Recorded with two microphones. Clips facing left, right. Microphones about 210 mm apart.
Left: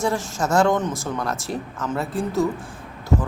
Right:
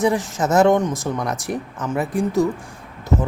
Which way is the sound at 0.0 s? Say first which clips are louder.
Right 4 dB; 20° right (ahead or behind).